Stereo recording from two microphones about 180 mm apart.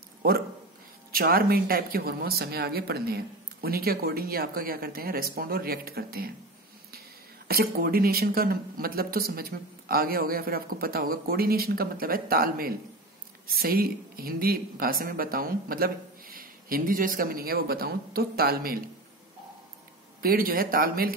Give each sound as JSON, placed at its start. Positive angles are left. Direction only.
{"t": 1.1, "sound": "a woman's voice", "side_deg": -55}
{"t": 7.4, "sound": "a woman's voice", "side_deg": -55}
{"t": 20.2, "sound": "speech", "side_deg": -55}